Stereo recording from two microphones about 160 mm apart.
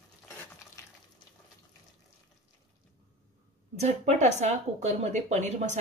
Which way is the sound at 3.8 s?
45° right (ahead or behind).